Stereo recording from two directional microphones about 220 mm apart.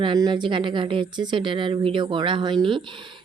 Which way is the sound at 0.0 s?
20° right (ahead or behind).